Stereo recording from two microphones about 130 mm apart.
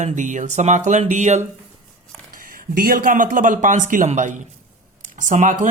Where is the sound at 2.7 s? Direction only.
90° right.